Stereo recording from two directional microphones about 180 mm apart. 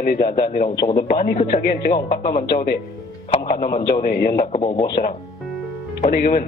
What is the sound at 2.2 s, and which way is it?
Speech, 30° left (ahead or behind).